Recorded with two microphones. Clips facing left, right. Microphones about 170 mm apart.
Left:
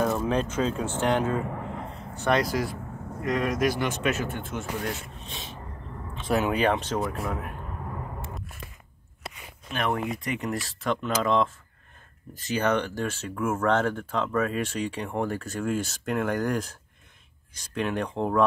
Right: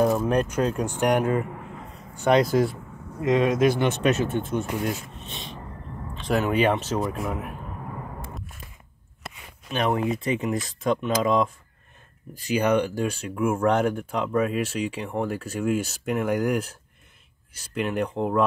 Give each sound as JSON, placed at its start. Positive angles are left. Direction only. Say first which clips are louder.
{"t": 0.1, "sound": "speech", "louder": "right 3 dB", "side_deg": -10}
{"t": 5.2, "sound": "a sound", "louder": "right 2 dB", "side_deg": 0}
{"t": 6.1, "sound": "speech", "louder": "right 2 dB", "side_deg": 0}
{"t": 9.7, "sound": "speech", "louder": "right 4 dB", "side_deg": -20}